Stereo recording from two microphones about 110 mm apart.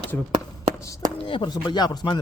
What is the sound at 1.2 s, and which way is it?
Speech, 45° left (ahead or behind).